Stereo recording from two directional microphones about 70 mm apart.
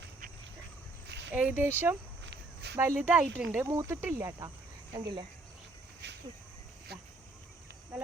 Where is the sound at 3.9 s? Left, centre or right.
Right.